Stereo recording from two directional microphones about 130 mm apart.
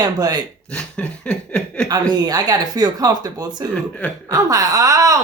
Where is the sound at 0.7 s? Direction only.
5° left (ahead or behind).